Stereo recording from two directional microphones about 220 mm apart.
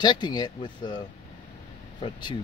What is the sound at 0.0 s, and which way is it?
Speech, 20° left (ahead or behind).